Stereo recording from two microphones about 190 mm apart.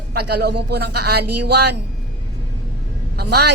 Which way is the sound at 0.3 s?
60° right (ahead or behind).